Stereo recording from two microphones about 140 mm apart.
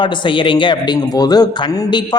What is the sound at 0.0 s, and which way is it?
Speech, 35° left (ahead or behind).